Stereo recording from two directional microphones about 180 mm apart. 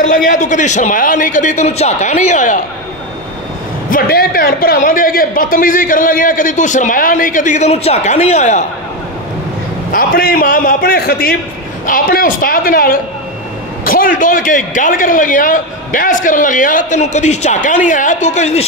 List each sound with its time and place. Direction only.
0.3 s a man's voice: 45° left (ahead or behind)
3.9 s a man's voice: 55° left (ahead or behind); by 8.6 s 40° left (ahead or behind)
9.9 s a man's voice: 55° left (ahead or behind); by 18.7 s 40° left (ahead or behind)